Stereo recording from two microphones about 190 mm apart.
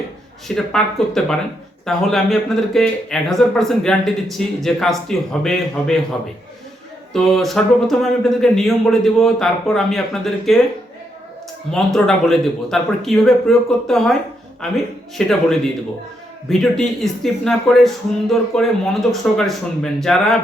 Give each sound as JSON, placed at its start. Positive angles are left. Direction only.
{"t": 0.4, "sound": "speech", "side_deg": 5}
{"t": 7.1, "sound": "speech", "side_deg": 0}
{"t": 11.7, "sound": "speech", "side_deg": 0}
{"t": 15.3, "sound": "speech", "side_deg": 0}